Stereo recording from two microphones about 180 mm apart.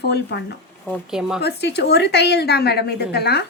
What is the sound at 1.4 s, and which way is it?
A woman's voice, 70° left (ahead or behind).